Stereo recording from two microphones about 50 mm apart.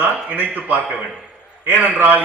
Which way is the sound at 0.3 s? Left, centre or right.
Right.